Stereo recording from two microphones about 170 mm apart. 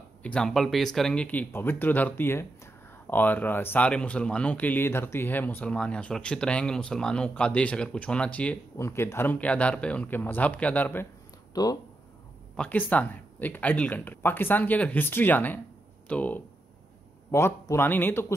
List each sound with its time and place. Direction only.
0.2 s speech: 5° left (ahead or behind)
11.5 s speech: 20° left (ahead or behind)
12.5 s speech: 10° left (ahead or behind)